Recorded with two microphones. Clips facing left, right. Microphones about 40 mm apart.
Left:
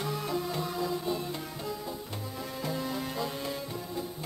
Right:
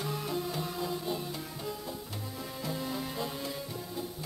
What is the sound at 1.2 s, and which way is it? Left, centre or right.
Music, centre.